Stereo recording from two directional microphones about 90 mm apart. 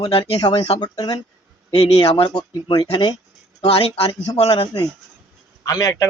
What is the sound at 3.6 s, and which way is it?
Speech, 90° left.